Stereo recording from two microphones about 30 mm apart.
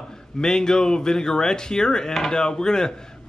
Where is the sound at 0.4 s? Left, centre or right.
Left.